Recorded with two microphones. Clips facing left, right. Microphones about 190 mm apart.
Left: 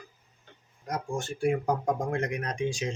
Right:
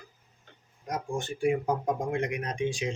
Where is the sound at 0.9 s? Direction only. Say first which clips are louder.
Even; 15° right (ahead or behind).